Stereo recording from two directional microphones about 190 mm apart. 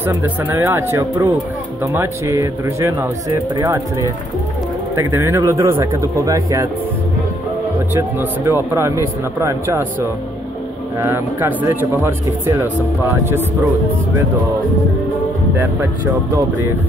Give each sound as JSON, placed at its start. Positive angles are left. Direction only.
{"t": 0.0, "sound": "speech", "side_deg": -10}
{"t": 7.9, "sound": "speech", "side_deg": -10}
{"t": 11.0, "sound": "speech", "side_deg": -15}
{"t": 15.5, "sound": "speech", "side_deg": -10}